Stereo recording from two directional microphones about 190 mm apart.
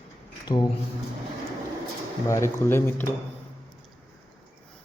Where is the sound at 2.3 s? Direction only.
15° left (ahead or behind).